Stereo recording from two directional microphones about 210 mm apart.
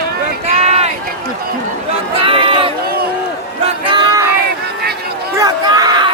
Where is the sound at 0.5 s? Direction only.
30° right (ahead or behind).